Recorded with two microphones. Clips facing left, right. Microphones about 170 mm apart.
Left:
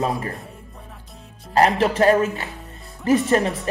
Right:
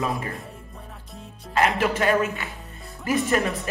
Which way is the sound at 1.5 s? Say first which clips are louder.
Left 4 dB; 35° left (ahead or behind).